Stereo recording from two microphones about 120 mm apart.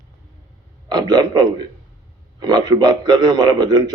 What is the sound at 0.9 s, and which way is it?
A man's voice, 35° right (ahead or behind).